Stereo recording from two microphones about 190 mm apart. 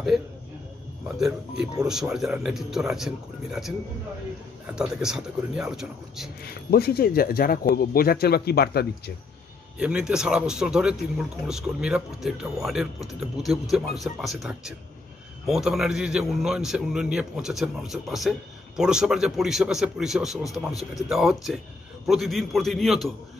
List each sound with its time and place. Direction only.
1.6 s speech: 5° right (ahead or behind)
6.4 s speech: 55° left (ahead or behind)
9.8 s speech: 5° right (ahead or behind)